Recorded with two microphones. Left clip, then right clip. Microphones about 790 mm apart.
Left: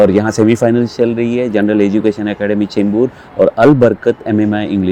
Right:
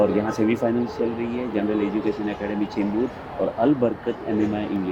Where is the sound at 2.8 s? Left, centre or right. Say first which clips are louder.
Left 10 dB; left.